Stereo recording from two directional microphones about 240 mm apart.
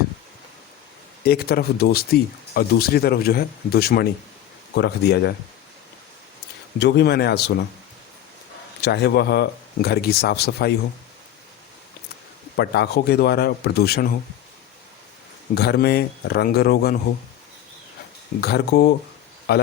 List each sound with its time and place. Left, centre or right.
1.2 s speech: left
6.7 s speech: left
8.8 s speech: left
12.5 s speech: left
15.5 s speech: left
18.3 s speech: left